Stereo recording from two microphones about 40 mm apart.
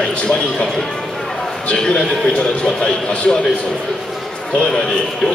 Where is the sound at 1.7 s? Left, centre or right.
Left.